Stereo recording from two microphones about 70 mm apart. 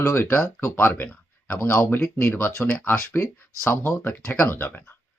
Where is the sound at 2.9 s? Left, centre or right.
Left.